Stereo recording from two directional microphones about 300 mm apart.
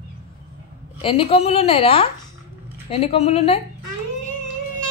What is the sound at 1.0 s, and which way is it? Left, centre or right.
A woman's voice, centre.